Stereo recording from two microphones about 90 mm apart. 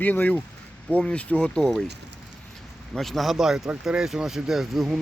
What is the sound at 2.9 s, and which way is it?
Speech, centre (ahead or behind).